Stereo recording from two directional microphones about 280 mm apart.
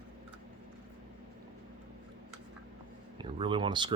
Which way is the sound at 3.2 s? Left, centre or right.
Centre.